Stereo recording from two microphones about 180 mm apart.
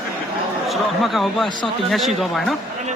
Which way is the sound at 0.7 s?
Centre (ahead or behind).